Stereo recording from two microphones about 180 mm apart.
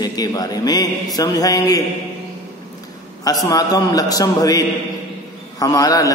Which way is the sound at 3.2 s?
20° left (ahead or behind).